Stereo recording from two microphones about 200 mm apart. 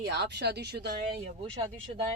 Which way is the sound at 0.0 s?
55° right (ahead or behind).